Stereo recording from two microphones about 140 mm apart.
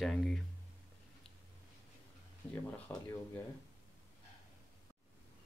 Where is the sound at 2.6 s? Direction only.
15° left (ahead or behind).